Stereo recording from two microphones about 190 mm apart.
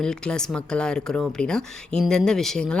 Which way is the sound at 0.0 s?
5° left (ahead or behind).